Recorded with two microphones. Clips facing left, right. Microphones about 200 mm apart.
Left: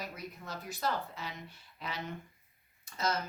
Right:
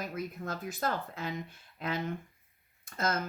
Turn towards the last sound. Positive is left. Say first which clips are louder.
# right 2 dB
turn(degrees=-50)  # may be behind; listen again after turning